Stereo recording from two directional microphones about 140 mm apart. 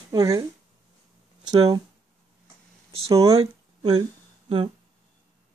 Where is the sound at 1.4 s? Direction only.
30° right (ahead or behind).